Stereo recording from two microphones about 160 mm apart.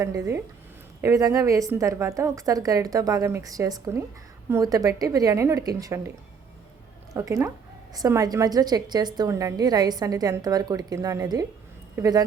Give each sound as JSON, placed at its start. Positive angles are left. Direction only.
{"t": 0.0, "sound": "a woman's voice", "side_deg": -20}
{"t": 7.1, "sound": "a woman's voice", "side_deg": -20}